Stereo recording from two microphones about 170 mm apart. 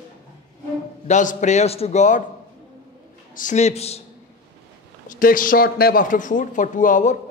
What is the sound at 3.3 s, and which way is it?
Speech, 50° left (ahead or behind).